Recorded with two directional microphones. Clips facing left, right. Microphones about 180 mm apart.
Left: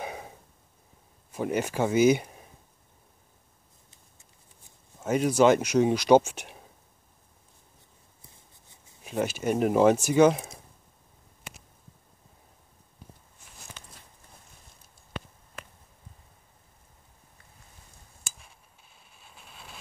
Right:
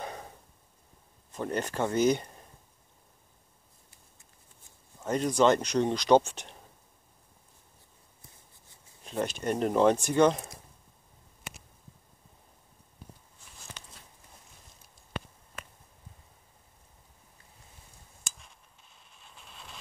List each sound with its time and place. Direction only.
0.0 s a sound: 10° left (ahead or behind)
1.3 s speech: 10° left (ahead or behind)
5.0 s speech: 5° left (ahead or behind)
9.0 s speech: 5° left (ahead or behind)
18.2 s a sound: 5° left (ahead or behind)
19.0 s vehicle: 5° left (ahead or behind)